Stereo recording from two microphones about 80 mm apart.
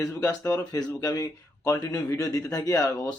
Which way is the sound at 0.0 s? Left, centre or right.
Left.